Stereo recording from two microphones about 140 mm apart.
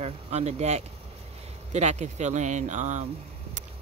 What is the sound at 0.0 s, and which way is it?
Speech, 50° right (ahead or behind).